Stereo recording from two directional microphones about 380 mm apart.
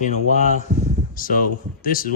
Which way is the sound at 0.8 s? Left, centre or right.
Left.